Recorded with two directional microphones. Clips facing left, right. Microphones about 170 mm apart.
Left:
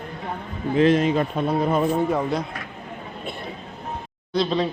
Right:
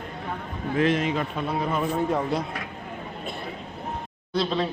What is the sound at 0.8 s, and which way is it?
Speech, 35° left (ahead or behind).